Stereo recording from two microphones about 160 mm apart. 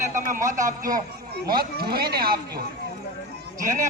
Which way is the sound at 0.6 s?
60° right (ahead or behind).